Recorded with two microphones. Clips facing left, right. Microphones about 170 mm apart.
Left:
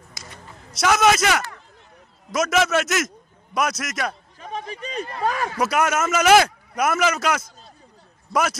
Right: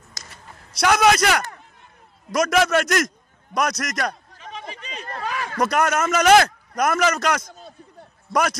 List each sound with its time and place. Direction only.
0.7 s a man's voice: centre (ahead or behind)
4.4 s a sound: 45° left (ahead or behind)
5.5 s a man's voice: 5° left (ahead or behind)